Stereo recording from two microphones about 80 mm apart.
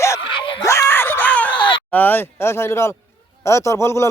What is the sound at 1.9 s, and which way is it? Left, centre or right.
Speech, left.